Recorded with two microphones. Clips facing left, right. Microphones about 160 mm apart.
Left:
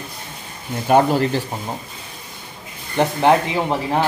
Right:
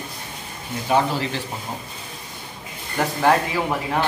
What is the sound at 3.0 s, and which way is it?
Speech, 20° left (ahead or behind).